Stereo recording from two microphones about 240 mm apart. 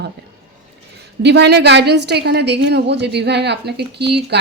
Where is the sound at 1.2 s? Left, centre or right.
Right.